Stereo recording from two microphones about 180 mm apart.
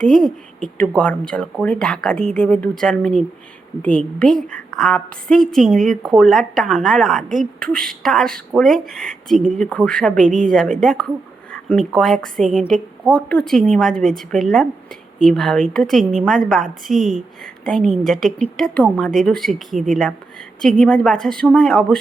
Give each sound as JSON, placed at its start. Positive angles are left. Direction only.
{"t": 0.0, "sound": "a woman's voice", "side_deg": 0}
{"t": 10.2, "sound": "a woman's voice", "side_deg": -50}
{"t": 10.5, "sound": "a woman's voice", "side_deg": 0}